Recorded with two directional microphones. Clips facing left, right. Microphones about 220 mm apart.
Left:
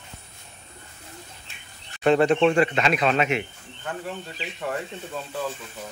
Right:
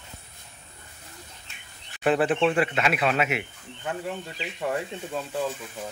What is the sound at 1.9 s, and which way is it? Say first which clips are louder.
Speech: left 4 dB; 5° right (ahead or behind).